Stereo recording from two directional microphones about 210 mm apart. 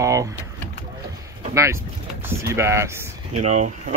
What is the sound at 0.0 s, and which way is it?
Speech, 15° right (ahead or behind).